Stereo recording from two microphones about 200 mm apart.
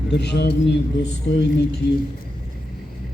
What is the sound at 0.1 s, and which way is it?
A man's voice, 55° left (ahead or behind).